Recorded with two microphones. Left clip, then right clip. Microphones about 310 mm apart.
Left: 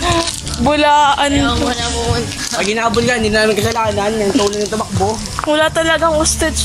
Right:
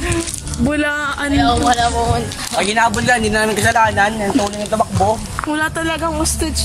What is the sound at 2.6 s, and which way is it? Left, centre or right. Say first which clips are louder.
Speech: even; right.